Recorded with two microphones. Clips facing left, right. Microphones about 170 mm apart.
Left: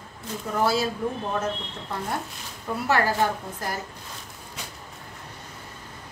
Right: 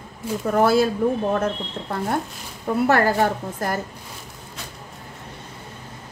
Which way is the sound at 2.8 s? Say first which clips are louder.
Right 4 dB; 50° right (ahead or behind).